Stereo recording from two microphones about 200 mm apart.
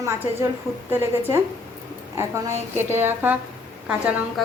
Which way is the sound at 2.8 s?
10° right (ahead or behind).